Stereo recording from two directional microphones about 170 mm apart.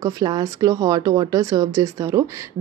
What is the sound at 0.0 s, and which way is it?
Speech, 20° right (ahead or behind).